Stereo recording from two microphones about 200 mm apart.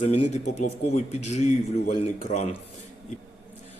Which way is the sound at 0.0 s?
35° left (ahead or behind).